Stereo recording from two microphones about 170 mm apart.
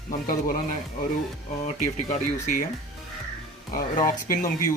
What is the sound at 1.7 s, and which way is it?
Speech, 45° left (ahead or behind).